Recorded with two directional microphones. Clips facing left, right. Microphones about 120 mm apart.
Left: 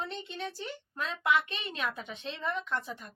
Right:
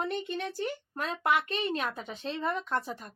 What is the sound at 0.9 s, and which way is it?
Speech, 40° right (ahead or behind).